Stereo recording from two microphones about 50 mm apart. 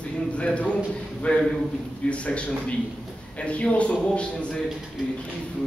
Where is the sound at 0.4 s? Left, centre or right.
Left.